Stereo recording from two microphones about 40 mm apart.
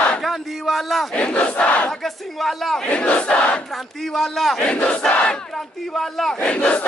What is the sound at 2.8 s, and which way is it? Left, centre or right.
Crowd, left.